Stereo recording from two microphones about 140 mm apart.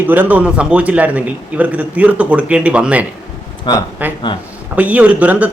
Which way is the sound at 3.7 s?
35° left (ahead or behind).